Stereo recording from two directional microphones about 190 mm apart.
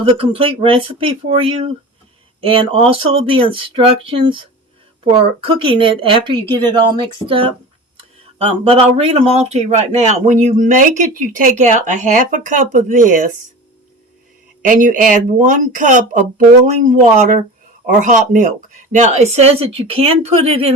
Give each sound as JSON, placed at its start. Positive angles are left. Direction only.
{"t": 0.0, "sound": "a woman's voice", "side_deg": -30}
{"t": 14.6, "sound": "speech", "side_deg": -45}
{"t": 17.8, "sound": "speech", "side_deg": -45}